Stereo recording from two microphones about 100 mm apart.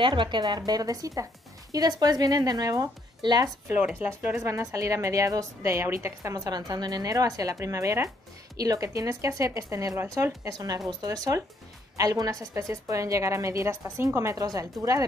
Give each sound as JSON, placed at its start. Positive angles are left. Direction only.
{"t": 0.0, "sound": "a woman's voice", "side_deg": -55}
{"t": 4.0, "sound": "speech", "side_deg": -15}
{"t": 4.4, "sound": "a woman's voice", "side_deg": -30}